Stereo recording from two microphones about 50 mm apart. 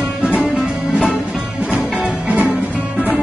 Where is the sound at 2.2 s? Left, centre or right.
Right.